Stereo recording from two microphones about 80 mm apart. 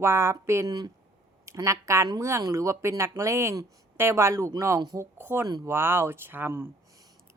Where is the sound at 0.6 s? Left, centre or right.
Right.